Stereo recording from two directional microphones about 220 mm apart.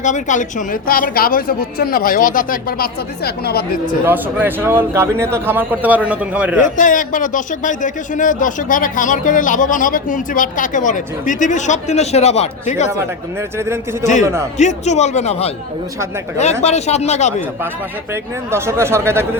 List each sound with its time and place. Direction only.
0.0 s a man's voice: 35° left (ahead or behind)
4.0 s a man's voice: 10° right (ahead or behind)
6.6 s a man's voice: 35° left (ahead or behind)
14.0 s a man's voice: 35° left (ahead or behind)
18.1 s a man's voice: 10° right (ahead or behind)